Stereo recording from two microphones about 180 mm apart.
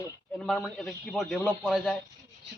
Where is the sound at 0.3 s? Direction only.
Centre (ahead or behind).